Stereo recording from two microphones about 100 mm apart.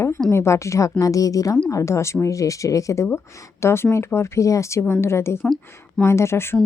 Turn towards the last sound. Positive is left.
turn(degrees=25)  # may be behind; listen again after turning